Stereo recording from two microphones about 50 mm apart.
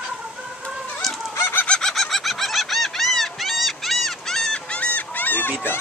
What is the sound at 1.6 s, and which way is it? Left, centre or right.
Chicken, centre.